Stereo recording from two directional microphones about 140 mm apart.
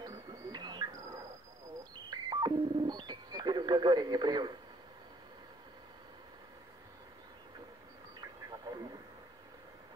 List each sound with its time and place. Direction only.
0.0 s a sound: 25° right (ahead or behind)
2.0 s telephone dialing: 30° right (ahead or behind)
8.2 s radio: 30° right (ahead or behind)